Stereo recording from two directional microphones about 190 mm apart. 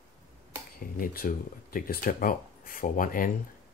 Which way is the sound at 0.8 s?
50° left (ahead or behind).